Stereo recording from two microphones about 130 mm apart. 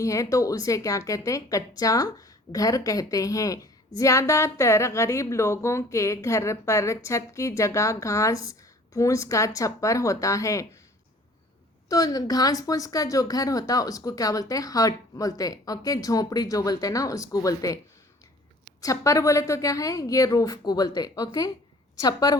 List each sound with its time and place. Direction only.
0.0 s a woman's voice: 25° left (ahead or behind)
11.9 s a woman's voice: 25° left (ahead or behind)
18.8 s a woman's voice: 25° left (ahead or behind)